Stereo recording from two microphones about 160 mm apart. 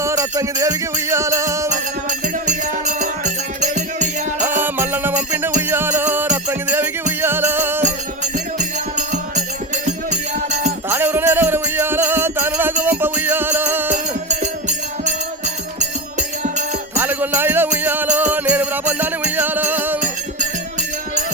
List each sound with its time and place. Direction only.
0.0 s music: 20° right (ahead or behind)
1.7 s music: 50° right (ahead or behind)
4.4 s music: 15° right (ahead or behind)
7.8 s music: 50° right (ahead or behind)
10.8 s music: 15° right (ahead or behind)
13.9 s music: 50° right (ahead or behind)
16.4 s music: 50° right (ahead or behind)
17.0 s music: 10° right (ahead or behind)